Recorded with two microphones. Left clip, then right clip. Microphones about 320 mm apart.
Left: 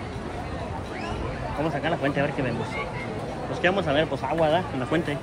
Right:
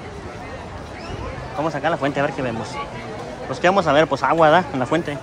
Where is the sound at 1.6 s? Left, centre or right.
Centre.